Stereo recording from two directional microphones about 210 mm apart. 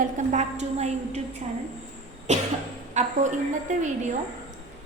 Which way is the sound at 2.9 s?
35° right (ahead or behind).